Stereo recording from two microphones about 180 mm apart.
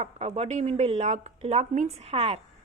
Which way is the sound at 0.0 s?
35° right (ahead or behind).